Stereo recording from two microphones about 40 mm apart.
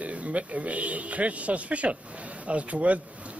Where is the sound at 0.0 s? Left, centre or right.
Right.